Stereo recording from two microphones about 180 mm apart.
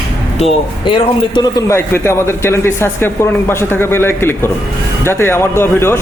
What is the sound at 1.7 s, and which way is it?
Speech, 15° left (ahead or behind).